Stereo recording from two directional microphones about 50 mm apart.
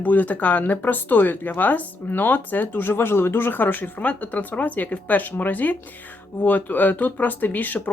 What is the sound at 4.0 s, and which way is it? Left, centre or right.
Speech, left.